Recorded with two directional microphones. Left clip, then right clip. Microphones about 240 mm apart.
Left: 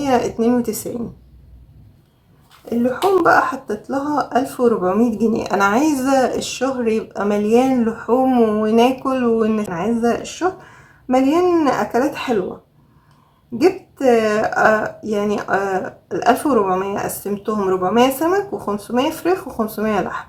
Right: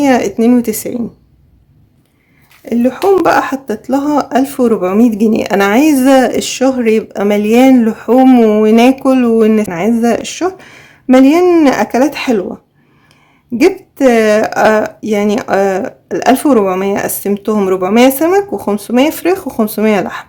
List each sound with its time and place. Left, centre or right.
0.0 s speech: right
2.6 s speech: right
14.0 s speech: right